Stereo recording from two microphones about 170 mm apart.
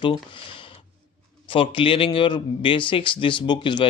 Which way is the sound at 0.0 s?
30° left (ahead or behind).